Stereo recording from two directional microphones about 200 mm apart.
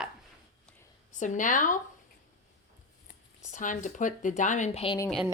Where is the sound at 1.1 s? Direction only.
40° left (ahead or behind).